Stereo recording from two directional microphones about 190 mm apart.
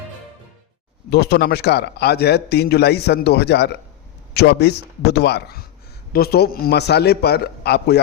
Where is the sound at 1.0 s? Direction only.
60° left (ahead or behind).